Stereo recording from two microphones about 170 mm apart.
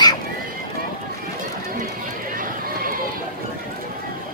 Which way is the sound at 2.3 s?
55° right (ahead or behind).